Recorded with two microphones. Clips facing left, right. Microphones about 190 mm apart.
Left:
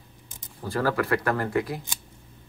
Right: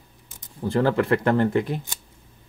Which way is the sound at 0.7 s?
25° right (ahead or behind).